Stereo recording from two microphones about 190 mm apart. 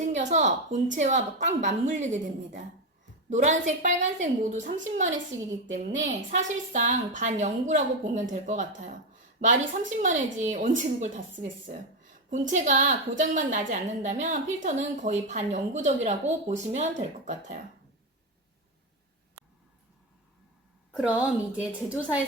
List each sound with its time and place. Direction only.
0.0 s a woman's voice: 40° right (ahead or behind)
6.3 s a woman's voice: 40° right (ahead or behind)
20.9 s a woman's voice: 5° right (ahead or behind)